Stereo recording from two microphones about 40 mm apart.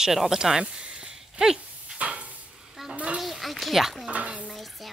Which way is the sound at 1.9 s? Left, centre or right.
Right.